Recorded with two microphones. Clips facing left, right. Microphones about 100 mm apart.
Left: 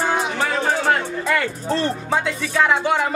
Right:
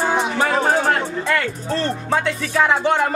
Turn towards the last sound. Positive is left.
turn(degrees=0)  # may be behind; listen again after turning